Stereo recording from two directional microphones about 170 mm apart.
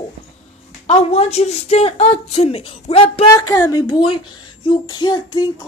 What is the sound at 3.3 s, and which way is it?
Child singing, 20° left (ahead or behind).